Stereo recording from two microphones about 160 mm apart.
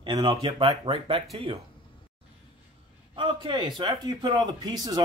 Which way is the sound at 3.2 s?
30° right (ahead or behind).